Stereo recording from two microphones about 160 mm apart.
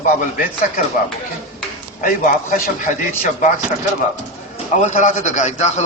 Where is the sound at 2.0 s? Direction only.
55° left (ahead or behind).